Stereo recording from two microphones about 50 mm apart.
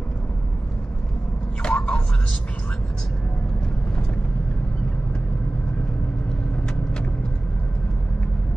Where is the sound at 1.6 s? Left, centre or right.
Centre.